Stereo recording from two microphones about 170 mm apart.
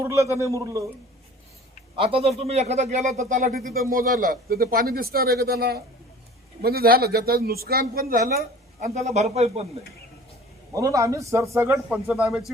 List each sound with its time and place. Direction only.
0.0 s a man's voice: 15° right (ahead or behind)
2.0 s speech: 35° right (ahead or behind)
10.7 s a man's voice: 20° right (ahead or behind); by 12.5 s 5° right (ahead or behind)